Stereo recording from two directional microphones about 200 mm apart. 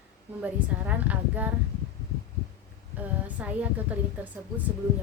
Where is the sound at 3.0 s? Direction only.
5° right (ahead or behind).